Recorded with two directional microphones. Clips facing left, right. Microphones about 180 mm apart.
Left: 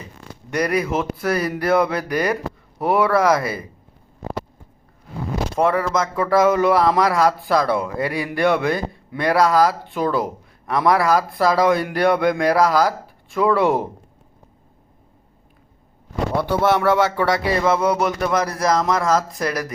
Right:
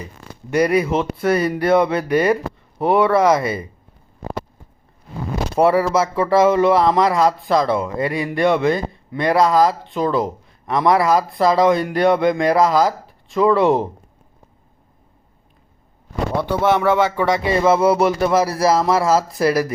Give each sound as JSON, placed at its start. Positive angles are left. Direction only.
{"t": 0.5, "sound": "speech", "side_deg": 0}
{"t": 5.5, "sound": "speech", "side_deg": -10}
{"t": 16.4, "sound": "speech", "side_deg": -15}
{"t": 17.6, "sound": "speech", "side_deg": -5}